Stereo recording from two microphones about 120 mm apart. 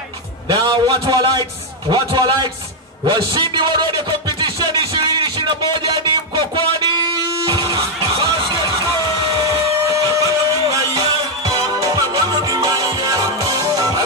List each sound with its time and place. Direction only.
0.5 s a man's voice: 40° right (ahead or behind)
7.4 s music: 40° right (ahead or behind)
9.8 s music: 25° right (ahead or behind)